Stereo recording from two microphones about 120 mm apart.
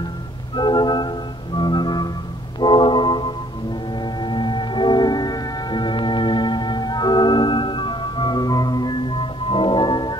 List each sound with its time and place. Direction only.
0.6 s music: 40° left (ahead or behind)